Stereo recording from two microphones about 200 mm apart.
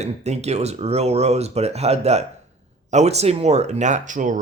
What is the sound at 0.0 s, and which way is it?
Speech, 35° right (ahead or behind).